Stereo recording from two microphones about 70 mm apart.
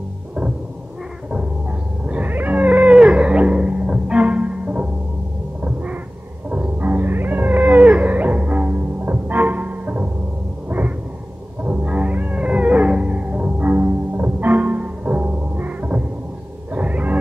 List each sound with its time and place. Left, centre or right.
2.0 s cat: right
6.5 s music: right
11.6 s music: right